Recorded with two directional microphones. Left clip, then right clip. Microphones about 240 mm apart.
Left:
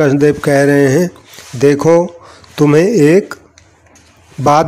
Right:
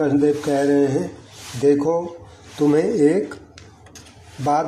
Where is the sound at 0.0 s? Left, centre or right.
Left.